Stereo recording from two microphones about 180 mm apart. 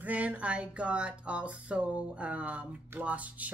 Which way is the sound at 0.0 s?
10° right (ahead or behind).